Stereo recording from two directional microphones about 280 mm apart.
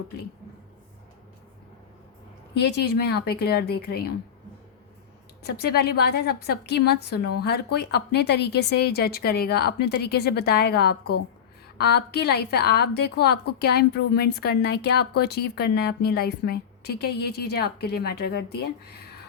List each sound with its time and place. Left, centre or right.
2.6 s a woman's voice: left
5.4 s a woman's voice: left